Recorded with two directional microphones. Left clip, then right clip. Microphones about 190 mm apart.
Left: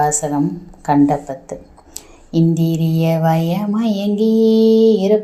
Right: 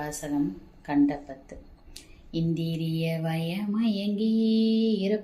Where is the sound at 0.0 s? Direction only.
10° left (ahead or behind).